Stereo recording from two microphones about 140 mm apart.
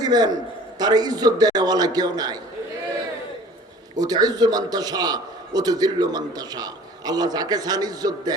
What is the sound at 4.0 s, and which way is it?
A man's voice, 25° right (ahead or behind).